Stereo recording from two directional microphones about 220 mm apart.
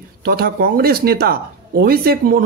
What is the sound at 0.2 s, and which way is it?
Speech, 45° right (ahead or behind).